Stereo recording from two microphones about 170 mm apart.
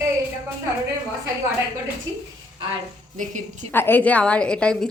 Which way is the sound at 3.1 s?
45° right (ahead or behind).